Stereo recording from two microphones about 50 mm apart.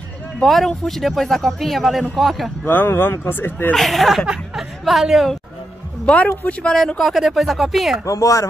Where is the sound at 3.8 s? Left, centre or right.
Centre.